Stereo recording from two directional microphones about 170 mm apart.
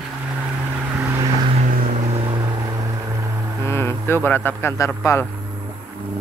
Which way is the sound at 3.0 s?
20° right (ahead or behind).